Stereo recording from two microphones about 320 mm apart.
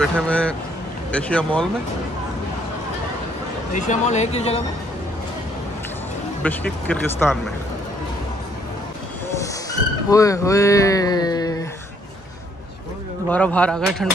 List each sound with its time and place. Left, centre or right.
0.0 s speech: centre
3.7 s speech: left
6.4 s speech: centre
9.4 s a sound: centre
13.3 s speech: centre